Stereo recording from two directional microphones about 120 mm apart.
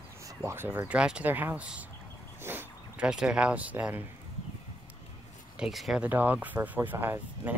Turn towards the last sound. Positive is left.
turn(degrees=-15)  # may be behind; listen again after turning